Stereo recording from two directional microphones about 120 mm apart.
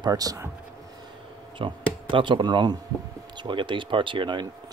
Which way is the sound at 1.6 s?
45° right (ahead or behind).